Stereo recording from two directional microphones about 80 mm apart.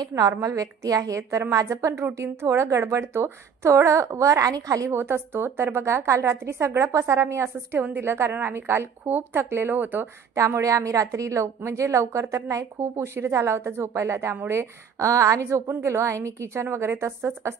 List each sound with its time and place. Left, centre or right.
0.0 s a woman's voice: right
4.9 s a woman's voice: right
10.3 s speech: right